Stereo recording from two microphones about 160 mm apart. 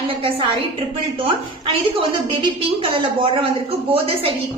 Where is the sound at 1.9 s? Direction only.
35° right (ahead or behind).